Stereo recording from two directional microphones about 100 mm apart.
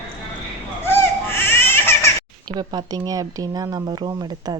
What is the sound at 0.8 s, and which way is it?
Baby cry, 25° left (ahead or behind).